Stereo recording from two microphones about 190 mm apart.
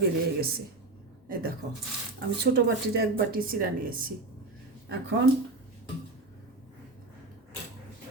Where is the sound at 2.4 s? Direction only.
60° right (ahead or behind).